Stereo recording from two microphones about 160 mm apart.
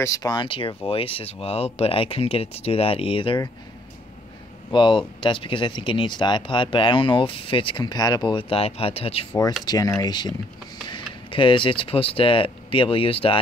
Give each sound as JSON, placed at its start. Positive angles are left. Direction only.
{"t": 0.0, "sound": "speech", "side_deg": 20}
{"t": 4.6, "sound": "speech", "side_deg": 30}
{"t": 9.7, "sound": "speech", "side_deg": 20}